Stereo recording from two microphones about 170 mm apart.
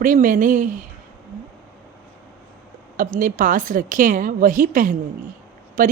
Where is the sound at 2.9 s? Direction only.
50° right (ahead or behind).